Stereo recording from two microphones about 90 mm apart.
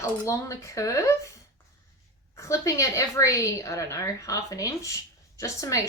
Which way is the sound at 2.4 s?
35° left (ahead or behind).